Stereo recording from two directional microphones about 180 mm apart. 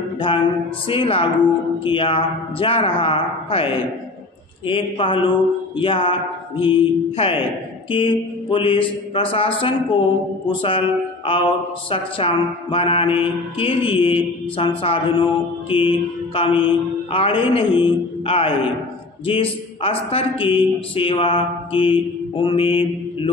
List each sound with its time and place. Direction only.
0.8 s a man's voice: 30° left (ahead or behind)
4.6 s a man's voice: 30° left (ahead or behind)
10.6 s a sound: 30° left (ahead or behind)
11.9 s mantra: 30° left (ahead or behind)
14.8 s a man's voice: 30° left (ahead or behind)